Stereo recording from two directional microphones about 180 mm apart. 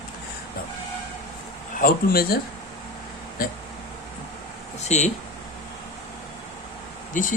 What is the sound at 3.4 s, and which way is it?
Speech, 55° left (ahead or behind).